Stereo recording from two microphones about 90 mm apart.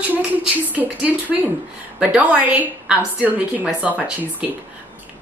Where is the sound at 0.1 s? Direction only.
15° right (ahead or behind).